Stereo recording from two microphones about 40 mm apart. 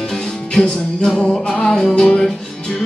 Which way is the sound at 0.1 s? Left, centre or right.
Centre.